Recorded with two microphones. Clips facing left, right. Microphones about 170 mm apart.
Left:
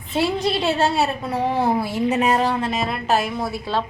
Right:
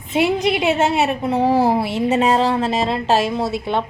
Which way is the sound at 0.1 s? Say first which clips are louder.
Right 3 dB; 20° right (ahead or behind).